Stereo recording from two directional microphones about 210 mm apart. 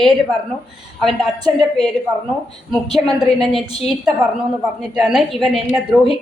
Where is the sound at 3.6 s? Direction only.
30° left (ahead or behind).